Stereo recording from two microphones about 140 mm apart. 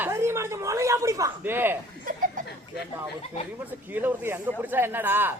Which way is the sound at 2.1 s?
75° right (ahead or behind).